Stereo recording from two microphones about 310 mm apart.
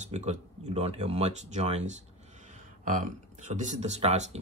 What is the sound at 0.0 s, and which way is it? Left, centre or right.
Speech, right.